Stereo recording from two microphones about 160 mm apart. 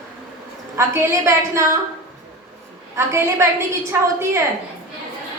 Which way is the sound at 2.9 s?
15° right (ahead or behind).